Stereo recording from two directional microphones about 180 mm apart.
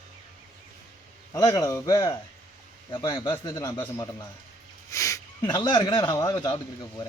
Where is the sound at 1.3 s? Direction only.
20° left (ahead or behind).